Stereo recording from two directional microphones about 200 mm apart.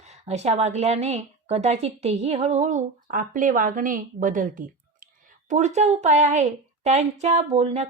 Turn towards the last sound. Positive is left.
turn(degrees=-30)  # may be behind; listen again after turning